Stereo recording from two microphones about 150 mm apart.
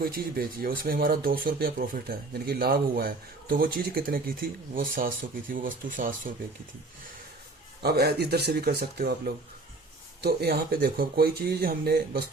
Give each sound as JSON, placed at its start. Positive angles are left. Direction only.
{"t": 0.0, "sound": "speech", "side_deg": -80}
{"t": 7.8, "sound": "speech", "side_deg": -90}